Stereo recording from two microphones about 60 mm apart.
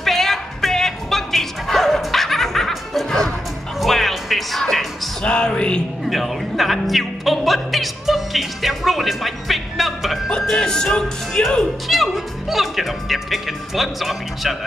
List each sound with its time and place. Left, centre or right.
0.0 s music: centre
5.2 s music: centre
6.0 s music: centre
11.9 s speech: centre